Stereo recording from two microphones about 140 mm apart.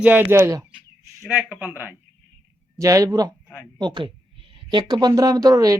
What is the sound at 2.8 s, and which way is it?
A woman's voice, 25° right (ahead or behind).